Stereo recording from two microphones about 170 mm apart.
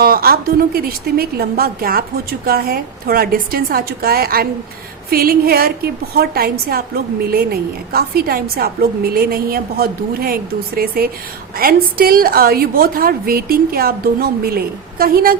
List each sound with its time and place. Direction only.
0.0 s a woman's voice: 60° right (ahead or behind)